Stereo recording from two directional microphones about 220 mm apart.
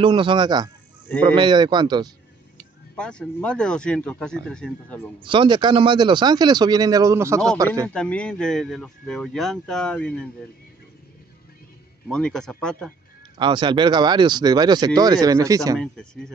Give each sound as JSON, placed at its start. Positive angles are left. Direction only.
{"t": 0.0, "sound": "speech", "side_deg": -20}
{"t": 3.0, "sound": "speech", "side_deg": 5}
{"t": 5.2, "sound": "speech", "side_deg": -20}
{"t": 7.9, "sound": "speech", "side_deg": 5}
{"t": 12.1, "sound": "speech", "side_deg": 5}
{"t": 13.4, "sound": "speech", "side_deg": -20}